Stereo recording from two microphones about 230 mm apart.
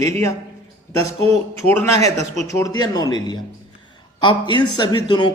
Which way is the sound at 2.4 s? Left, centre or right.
Centre.